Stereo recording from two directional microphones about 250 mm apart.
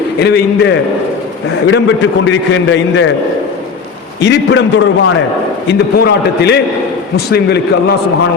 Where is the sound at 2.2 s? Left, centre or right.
Left.